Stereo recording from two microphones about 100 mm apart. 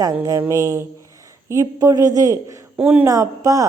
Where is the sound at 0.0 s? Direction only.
35° right (ahead or behind).